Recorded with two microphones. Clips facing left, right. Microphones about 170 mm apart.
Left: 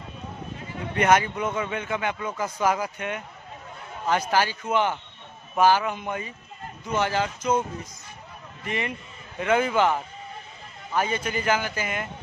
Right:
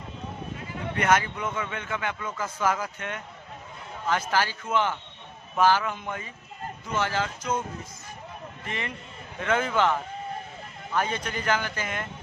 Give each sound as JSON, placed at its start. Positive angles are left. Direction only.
{"t": 0.9, "sound": "a man's voice", "side_deg": 20}
{"t": 8.6, "sound": "a man's voice", "side_deg": 15}